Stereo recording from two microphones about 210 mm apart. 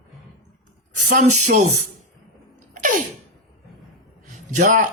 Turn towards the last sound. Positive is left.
turn(degrees=-35)  # may be behind; listen again after turning